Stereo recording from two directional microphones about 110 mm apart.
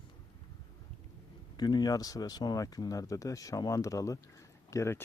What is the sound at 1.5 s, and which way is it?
Speech, 40° left (ahead or behind).